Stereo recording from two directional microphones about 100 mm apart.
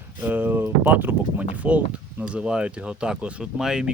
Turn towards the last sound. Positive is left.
turn(degrees=-5)  # may be behind; listen again after turning